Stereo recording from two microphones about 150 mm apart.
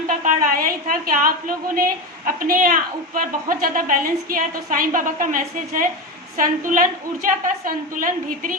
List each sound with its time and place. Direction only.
0.3 s a woman's voice: 65° right (ahead or behind)